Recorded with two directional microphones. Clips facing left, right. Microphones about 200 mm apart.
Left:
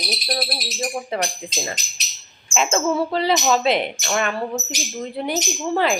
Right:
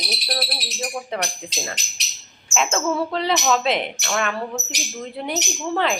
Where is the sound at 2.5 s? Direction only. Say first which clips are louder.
Left 2 dB; centre (ahead or behind).